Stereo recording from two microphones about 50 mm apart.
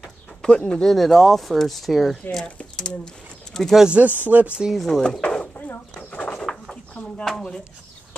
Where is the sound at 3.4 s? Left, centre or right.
Centre.